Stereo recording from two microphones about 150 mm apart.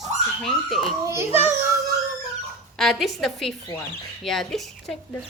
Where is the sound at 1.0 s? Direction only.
20° right (ahead or behind).